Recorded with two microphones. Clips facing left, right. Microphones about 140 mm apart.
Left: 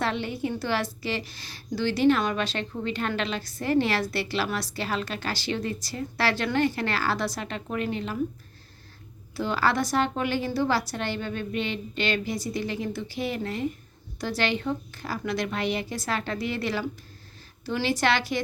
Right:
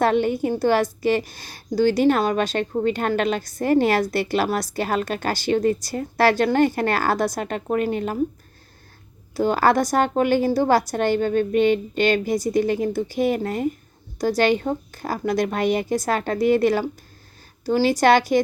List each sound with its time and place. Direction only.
0.0 s a woman's voice: 50° right (ahead or behind)
9.3 s a woman's voice: 45° right (ahead or behind)